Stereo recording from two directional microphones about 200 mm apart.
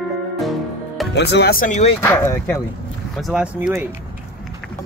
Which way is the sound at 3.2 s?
Centre (ahead or behind).